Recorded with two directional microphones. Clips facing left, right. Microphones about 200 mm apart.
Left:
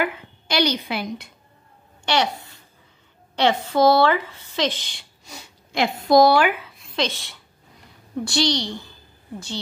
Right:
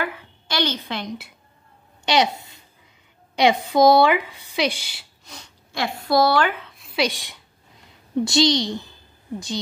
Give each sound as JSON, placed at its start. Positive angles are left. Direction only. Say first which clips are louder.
{"t": 0.0, "sound": "a woman's voice", "louder": "left 3 dB", "side_deg": 15}
{"t": 2.0, "sound": "a child's voice", "louder": "right 2 dB", "side_deg": -20}
{"t": 5.2, "sound": "a sound", "louder": "left 2 dB", "side_deg": 5}
{"t": 5.7, "sound": "a woman's voice", "louder": "left 4 dB", "side_deg": 20}